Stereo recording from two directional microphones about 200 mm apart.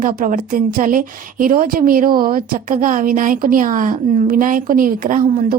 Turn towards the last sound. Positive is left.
turn(degrees=-40)  # may be behind; listen again after turning